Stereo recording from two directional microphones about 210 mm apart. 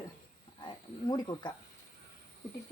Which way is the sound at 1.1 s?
20° left (ahead or behind).